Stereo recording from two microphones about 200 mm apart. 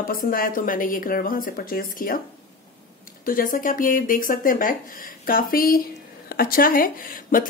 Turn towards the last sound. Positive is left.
turn(degrees=45)  # may be behind; listen again after turning